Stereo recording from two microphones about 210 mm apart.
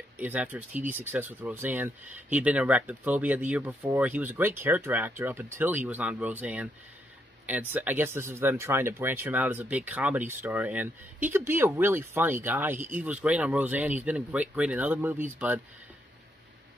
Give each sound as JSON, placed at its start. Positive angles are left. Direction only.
{"t": 0.2, "sound": "speech", "side_deg": -10}